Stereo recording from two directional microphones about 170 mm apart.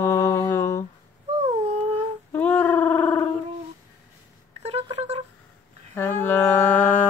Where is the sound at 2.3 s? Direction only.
10° left (ahead or behind).